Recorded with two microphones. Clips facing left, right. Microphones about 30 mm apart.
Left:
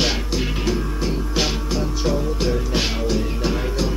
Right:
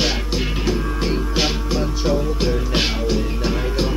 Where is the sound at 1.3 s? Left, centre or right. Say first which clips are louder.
Right 2 dB; centre.